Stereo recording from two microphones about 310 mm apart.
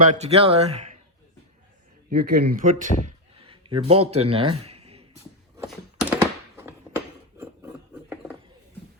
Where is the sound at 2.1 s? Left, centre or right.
Right.